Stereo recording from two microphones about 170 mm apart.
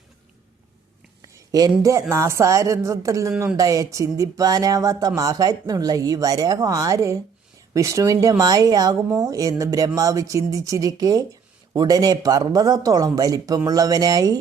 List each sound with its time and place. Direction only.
1.3 s a woman's voice: 20° right (ahead or behind)